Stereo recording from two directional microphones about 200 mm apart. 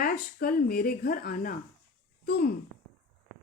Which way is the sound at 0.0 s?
50° left (ahead or behind).